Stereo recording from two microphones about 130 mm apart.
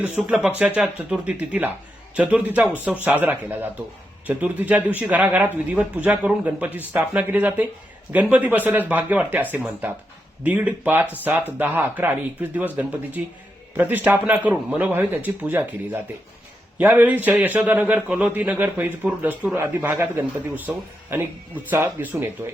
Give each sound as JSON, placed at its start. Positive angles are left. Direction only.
{"t": 0.0, "sound": "a man's voice", "side_deg": -10}